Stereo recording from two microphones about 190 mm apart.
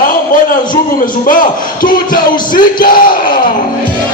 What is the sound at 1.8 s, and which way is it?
Music, 50° left (ahead or behind).